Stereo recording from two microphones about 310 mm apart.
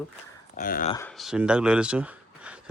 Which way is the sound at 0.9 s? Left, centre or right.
Centre.